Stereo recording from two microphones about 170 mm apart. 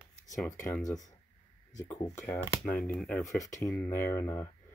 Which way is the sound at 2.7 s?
5° left (ahead or behind).